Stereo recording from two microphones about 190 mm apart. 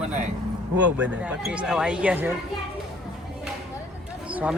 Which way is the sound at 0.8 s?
5° right (ahead or behind).